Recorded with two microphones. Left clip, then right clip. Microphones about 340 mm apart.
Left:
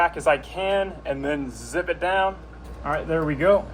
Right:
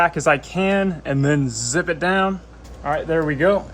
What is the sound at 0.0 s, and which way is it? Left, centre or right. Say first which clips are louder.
Speech: right 3 dB; right.